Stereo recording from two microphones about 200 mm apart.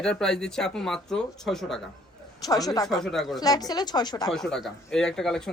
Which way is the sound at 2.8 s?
Centre (ahead or behind).